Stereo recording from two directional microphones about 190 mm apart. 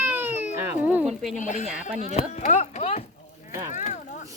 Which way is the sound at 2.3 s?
40° left (ahead or behind).